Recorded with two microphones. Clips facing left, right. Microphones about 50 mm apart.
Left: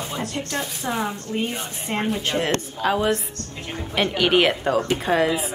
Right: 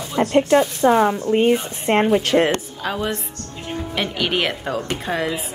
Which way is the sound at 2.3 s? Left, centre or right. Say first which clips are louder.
Right 9 dB; right.